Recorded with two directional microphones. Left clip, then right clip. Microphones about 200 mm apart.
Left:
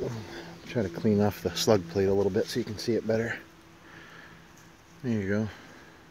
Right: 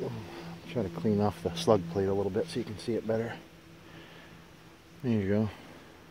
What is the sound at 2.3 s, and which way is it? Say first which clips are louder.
Speech: left 4 dB; 35° left (ahead or behind).